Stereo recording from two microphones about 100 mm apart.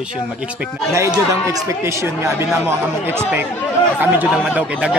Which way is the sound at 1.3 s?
30° right (ahead or behind).